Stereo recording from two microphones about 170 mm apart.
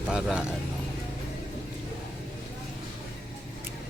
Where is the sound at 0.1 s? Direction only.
5° right (ahead or behind).